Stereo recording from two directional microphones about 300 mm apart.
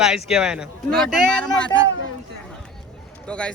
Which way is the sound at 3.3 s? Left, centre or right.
Centre.